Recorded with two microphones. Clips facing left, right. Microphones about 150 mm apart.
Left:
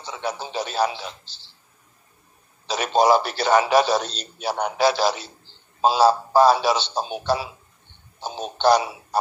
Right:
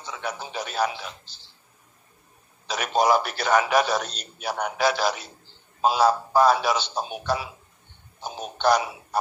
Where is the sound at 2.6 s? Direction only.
30° left (ahead or behind).